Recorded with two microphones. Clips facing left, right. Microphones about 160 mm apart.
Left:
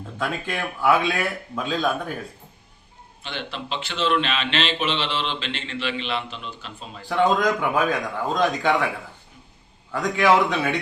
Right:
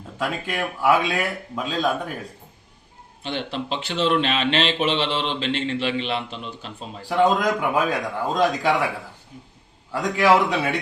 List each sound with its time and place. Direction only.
0.2 s speech: 5° right (ahead or behind)
3.2 s speech: 35° right (ahead or behind)
7.1 s speech: 5° right (ahead or behind)
9.9 s speech: 5° right (ahead or behind)